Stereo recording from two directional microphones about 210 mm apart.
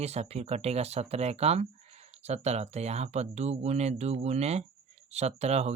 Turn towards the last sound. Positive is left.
turn(degrees=-30)  # may be behind; listen again after turning